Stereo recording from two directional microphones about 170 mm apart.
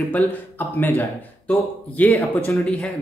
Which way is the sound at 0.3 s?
10° left (ahead or behind).